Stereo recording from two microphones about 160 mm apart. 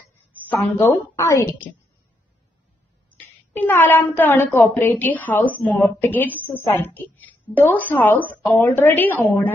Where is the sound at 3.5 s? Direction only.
10° left (ahead or behind).